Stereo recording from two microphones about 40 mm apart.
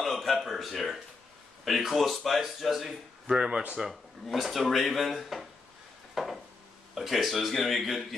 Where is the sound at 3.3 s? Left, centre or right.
Right.